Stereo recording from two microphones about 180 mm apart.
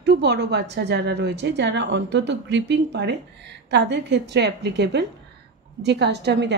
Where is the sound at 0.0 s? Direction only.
70° right (ahead or behind).